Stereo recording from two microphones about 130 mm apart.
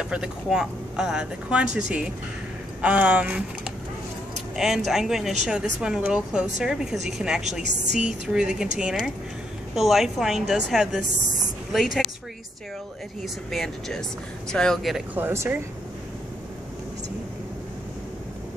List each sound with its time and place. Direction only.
0.0 s speech: 5° right (ahead or behind)
2.8 s speech: 10° right (ahead or behind)
4.6 s a woman's voice: 5° right (ahead or behind)
13.5 s a woman's voice: centre (ahead or behind)
15.1 s speech: 20° right (ahead or behind)